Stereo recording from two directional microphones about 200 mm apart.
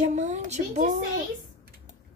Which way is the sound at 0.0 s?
35° right (ahead or behind).